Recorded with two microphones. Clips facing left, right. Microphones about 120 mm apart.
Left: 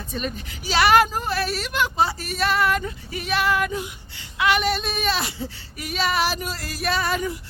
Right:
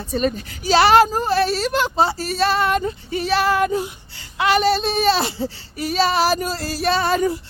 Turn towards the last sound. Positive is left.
turn(degrees=-35)  # may be behind; listen again after turning